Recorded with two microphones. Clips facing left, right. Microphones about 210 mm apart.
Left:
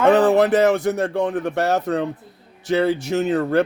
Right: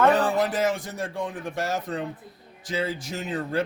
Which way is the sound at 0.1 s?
70° left (ahead or behind).